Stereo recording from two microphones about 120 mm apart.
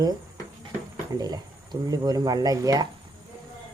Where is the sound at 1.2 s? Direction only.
35° right (ahead or behind).